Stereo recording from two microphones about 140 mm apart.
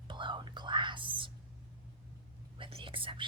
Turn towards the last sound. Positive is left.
turn(degrees=-40)  # may be behind; listen again after turning